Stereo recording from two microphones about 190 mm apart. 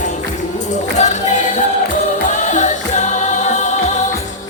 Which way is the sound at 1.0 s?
40° left (ahead or behind).